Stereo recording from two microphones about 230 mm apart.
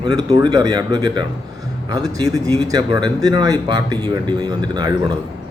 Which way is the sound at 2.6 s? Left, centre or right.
Centre.